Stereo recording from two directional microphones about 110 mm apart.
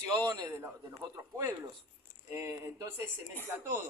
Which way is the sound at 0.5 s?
20° right (ahead or behind).